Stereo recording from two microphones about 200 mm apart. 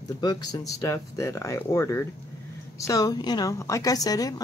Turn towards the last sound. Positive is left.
turn(degrees=20)  # may be behind; listen again after turning